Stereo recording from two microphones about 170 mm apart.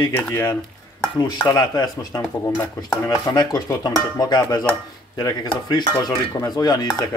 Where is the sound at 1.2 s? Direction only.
25° left (ahead or behind).